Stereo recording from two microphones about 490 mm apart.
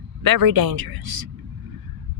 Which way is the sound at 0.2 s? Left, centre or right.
Right.